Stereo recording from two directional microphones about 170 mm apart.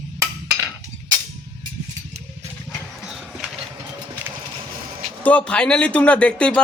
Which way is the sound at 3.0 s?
Centre (ahead or behind).